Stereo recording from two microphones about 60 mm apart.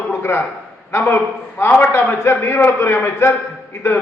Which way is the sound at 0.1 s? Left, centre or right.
Left.